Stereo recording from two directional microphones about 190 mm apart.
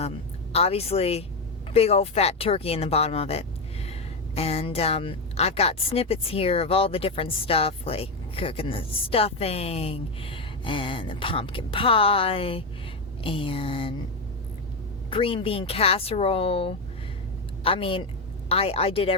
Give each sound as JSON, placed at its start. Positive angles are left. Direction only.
{"t": 0.5, "sound": "a woman's voice", "side_deg": 30}
{"t": 15.1, "sound": "a woman's voice", "side_deg": 30}